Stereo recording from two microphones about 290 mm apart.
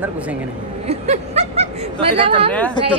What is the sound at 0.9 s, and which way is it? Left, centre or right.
Speech, right.